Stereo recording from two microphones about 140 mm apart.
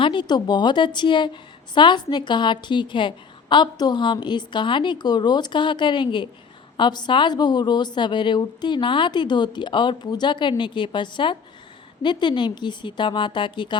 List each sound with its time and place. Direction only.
0.0 s a woman's voice: 35° left (ahead or behind)